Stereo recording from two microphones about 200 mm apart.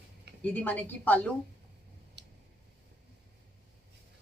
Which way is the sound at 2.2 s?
60° right (ahead or behind).